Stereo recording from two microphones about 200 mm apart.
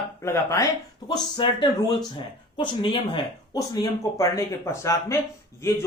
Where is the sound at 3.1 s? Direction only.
20° left (ahead or behind).